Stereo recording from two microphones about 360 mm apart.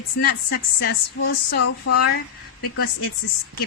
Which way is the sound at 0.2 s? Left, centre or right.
Left.